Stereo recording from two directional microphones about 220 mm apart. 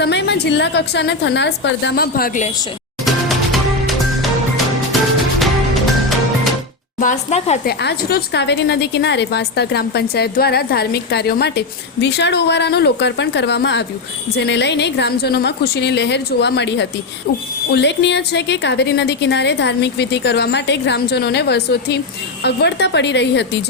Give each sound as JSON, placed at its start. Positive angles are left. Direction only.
{"t": 0.0, "sound": "a woman's voice", "side_deg": 50}
{"t": 3.0, "sound": "music", "side_deg": 0}
{"t": 7.0, "sound": "speech", "side_deg": 35}
{"t": 7.6, "sound": "a woman's voice", "side_deg": 45}